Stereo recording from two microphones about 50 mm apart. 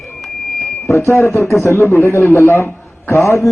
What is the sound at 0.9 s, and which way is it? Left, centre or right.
Speech, left.